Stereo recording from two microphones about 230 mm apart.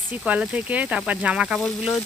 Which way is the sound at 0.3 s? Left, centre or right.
Centre.